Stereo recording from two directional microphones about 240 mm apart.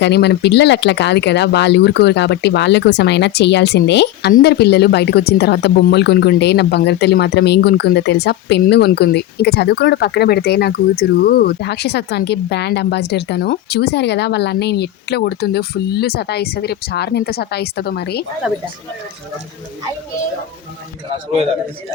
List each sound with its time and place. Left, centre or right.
0.0 s speech: left